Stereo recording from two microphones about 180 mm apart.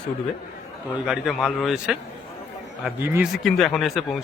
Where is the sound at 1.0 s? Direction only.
Centre (ahead or behind).